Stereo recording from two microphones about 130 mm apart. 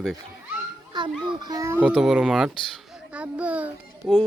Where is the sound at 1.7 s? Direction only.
5° right (ahead or behind).